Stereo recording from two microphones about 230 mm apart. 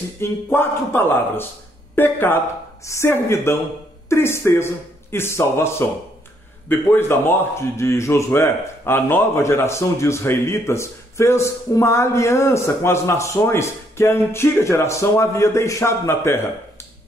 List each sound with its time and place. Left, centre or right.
0.2 s speech: centre